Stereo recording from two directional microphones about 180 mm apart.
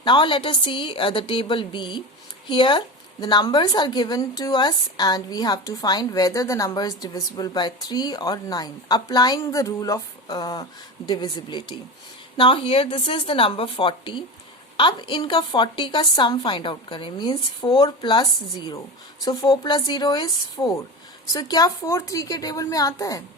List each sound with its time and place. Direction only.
0.0 s a woman's voice: 25° left (ahead or behind)